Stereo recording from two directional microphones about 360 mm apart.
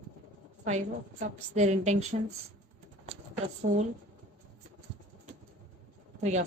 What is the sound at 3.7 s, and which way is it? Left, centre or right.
Speech, right.